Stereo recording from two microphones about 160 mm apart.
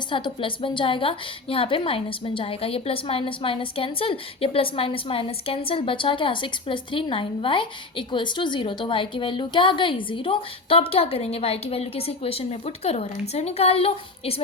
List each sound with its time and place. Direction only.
0.1 s a woman's voice: 30° left (ahead or behind)